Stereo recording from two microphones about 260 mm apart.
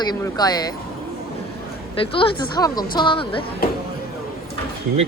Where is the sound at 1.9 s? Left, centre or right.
Left.